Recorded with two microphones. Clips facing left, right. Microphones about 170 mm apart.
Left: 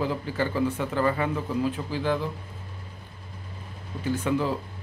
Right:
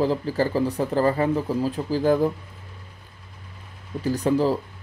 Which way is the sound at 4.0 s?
35° right (ahead or behind).